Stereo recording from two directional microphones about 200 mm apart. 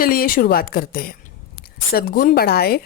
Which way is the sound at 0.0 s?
45° left (ahead or behind).